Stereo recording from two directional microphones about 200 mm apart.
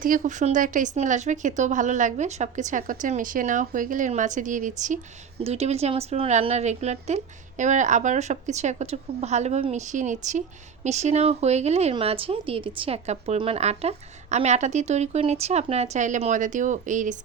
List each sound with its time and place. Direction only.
0.0 s speech: 40° right (ahead or behind)